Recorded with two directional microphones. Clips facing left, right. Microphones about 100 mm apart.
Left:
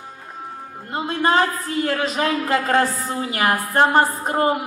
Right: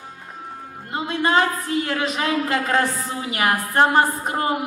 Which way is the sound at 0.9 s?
35° left (ahead or behind).